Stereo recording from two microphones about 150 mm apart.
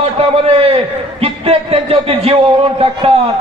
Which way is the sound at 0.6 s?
40° right (ahead or behind).